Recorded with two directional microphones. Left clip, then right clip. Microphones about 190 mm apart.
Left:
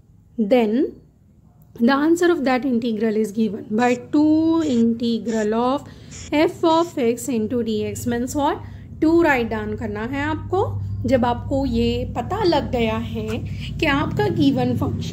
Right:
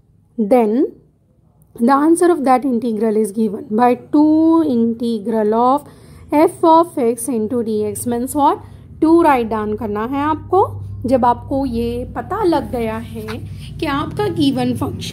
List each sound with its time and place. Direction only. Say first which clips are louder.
0.4 s a woman's voice: right 4 dB; 5° right (ahead or behind)
12.4 s a woman's voice: right 2 dB; 25° right (ahead or behind)